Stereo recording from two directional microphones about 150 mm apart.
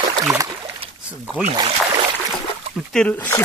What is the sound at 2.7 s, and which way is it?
Speech, 5° left (ahead or behind).